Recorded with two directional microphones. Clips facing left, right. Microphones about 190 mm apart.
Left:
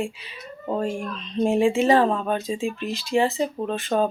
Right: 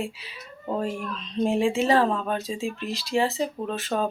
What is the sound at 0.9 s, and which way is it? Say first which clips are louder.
Speech: left 2 dB; 45° left (ahead or behind).